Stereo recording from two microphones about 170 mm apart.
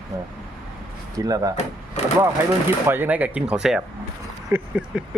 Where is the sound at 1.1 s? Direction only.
20° right (ahead or behind).